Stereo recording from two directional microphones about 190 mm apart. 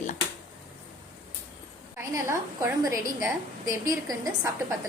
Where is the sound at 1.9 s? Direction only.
15° right (ahead or behind).